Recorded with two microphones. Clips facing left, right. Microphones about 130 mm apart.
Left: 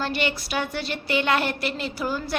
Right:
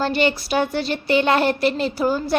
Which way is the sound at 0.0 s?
35° right (ahead or behind).